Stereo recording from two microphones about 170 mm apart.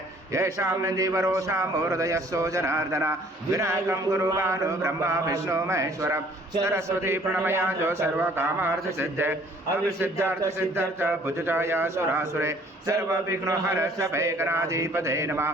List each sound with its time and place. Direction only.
0.3 s a man's voice: 15° right (ahead or behind)